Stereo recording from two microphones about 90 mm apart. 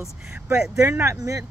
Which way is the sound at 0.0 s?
5° right (ahead or behind).